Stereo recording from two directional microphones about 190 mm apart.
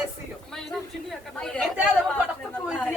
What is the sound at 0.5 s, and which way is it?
A woman's voice, centre (ahead or behind).